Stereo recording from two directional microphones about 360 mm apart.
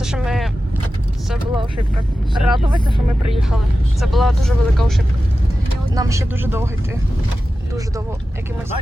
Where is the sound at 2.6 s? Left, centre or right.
Centre.